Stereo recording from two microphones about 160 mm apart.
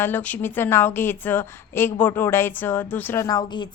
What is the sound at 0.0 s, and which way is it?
A woman's voice, 10° left (ahead or behind).